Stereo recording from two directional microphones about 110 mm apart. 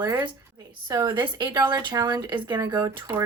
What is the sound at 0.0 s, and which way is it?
Speech, 35° right (ahead or behind).